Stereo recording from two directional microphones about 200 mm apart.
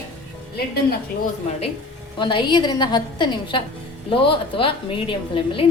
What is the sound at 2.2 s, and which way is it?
A woman's voice, 25° left (ahead or behind).